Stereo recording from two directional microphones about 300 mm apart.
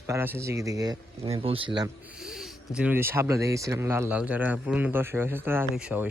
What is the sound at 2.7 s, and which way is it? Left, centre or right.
Speech, centre.